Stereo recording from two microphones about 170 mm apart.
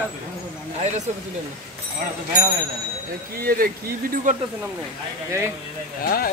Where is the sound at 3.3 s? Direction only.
60° right (ahead or behind).